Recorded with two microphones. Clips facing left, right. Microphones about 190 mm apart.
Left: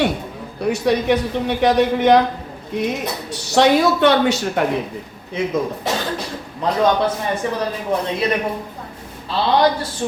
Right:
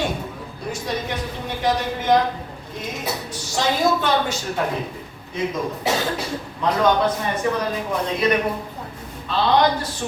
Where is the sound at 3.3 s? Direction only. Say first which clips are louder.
Left 11 dB; 70° left (ahead or behind).